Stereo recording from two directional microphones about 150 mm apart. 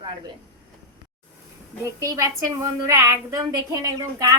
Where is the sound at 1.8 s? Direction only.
20° right (ahead or behind).